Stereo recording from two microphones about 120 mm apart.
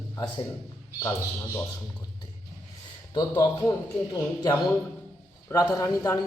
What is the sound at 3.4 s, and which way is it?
A man's voice, 30° left (ahead or behind).